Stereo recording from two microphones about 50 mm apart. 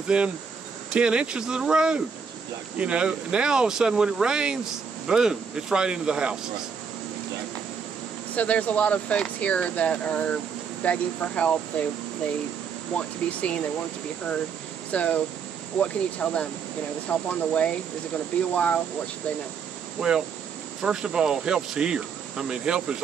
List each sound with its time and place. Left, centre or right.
0.1 s insect: centre
0.9 s speech: right
8.4 s speech: left
12.9 s speech: left
14.9 s speech: left
20.0 s speech: centre